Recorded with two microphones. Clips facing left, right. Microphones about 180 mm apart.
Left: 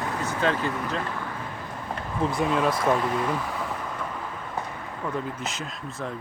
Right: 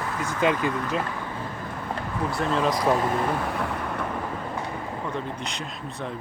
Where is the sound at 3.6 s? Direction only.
65° right (ahead or behind).